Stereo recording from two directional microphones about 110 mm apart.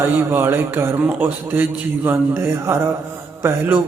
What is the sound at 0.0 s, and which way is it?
Speech, 20° right (ahead or behind).